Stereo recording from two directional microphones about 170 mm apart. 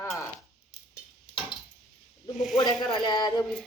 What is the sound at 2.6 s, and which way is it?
Speech, 25° left (ahead or behind).